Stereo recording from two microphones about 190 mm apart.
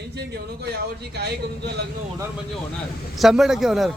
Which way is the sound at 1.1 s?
60° right (ahead or behind).